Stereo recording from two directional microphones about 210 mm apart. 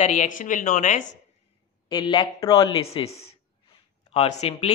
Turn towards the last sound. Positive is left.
turn(degrees=30)  # may be behind; listen again after turning